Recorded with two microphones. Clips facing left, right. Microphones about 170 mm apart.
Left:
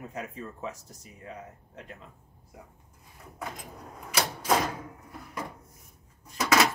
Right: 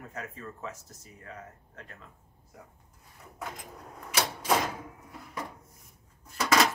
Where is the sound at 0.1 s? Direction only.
15° left (ahead or behind).